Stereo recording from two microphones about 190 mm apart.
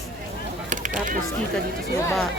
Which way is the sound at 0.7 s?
40° right (ahead or behind).